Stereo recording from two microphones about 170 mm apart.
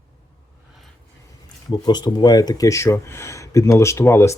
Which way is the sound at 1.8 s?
25° left (ahead or behind).